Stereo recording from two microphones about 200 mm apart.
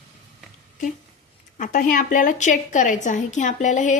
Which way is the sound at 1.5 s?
40° left (ahead or behind).